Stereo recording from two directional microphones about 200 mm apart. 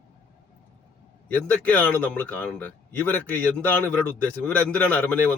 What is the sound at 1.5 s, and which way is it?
A man's voice, 5° left (ahead or behind).